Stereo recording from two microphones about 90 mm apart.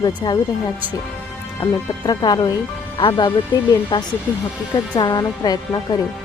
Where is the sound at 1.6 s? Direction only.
55° left (ahead or behind).